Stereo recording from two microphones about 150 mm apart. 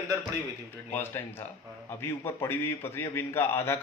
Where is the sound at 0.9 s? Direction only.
15° left (ahead or behind).